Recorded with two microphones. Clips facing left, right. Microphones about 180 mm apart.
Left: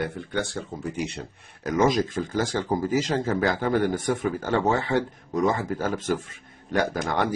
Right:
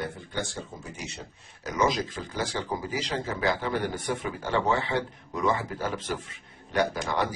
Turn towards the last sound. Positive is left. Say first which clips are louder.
# left 2 dB
turn(degrees=50)  # may be behind; listen again after turning